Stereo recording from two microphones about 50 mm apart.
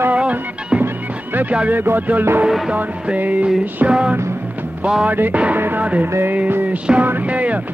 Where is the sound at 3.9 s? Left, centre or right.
Centre.